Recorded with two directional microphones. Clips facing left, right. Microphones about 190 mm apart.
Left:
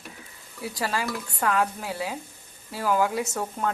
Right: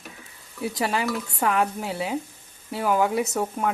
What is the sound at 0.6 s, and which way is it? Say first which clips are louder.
Speech: right 4 dB; 20° right (ahead or behind).